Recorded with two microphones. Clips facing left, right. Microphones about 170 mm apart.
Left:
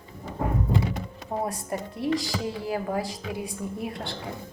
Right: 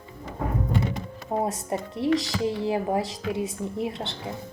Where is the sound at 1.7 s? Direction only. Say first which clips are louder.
Right 3 dB; 25° right (ahead or behind).